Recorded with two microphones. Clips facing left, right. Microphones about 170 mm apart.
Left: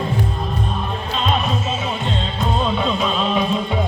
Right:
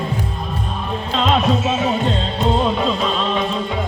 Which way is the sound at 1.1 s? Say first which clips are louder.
Right 4 dB; 85° right.